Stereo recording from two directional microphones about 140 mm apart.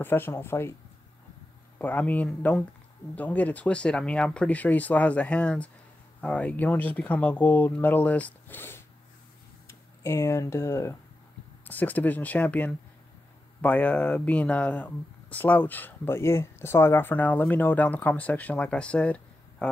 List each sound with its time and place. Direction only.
0.0 s speech: 15° left (ahead or behind)
1.8 s speech: 10° left (ahead or behind)